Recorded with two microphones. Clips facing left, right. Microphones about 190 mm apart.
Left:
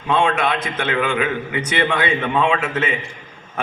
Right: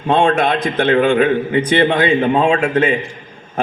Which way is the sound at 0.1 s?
35° right (ahead or behind).